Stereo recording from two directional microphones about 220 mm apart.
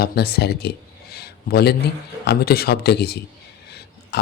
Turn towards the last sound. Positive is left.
turn(degrees=50)  # may be behind; listen again after turning